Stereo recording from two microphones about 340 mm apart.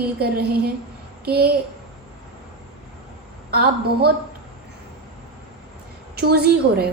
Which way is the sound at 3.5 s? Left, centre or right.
Right.